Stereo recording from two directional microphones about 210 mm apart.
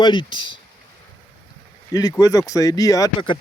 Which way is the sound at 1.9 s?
15° left (ahead or behind).